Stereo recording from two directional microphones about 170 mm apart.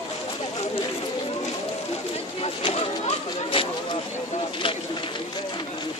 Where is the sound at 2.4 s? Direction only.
35° left (ahead or behind).